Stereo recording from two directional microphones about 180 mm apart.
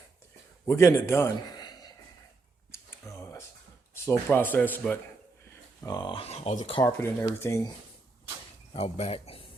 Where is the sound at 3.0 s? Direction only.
15° left (ahead or behind).